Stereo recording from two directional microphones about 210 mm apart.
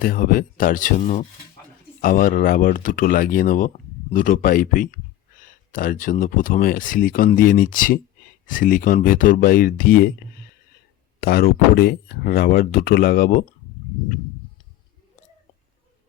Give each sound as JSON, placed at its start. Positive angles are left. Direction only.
{"t": 0.0, "sound": "speech", "side_deg": 45}
{"t": 11.2, "sound": "speech", "side_deg": 45}